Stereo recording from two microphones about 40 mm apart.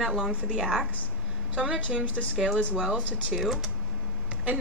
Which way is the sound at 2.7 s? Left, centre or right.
Centre.